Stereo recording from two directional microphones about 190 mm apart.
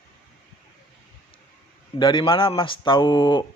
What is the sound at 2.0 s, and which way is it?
Speech, 25° left (ahead or behind).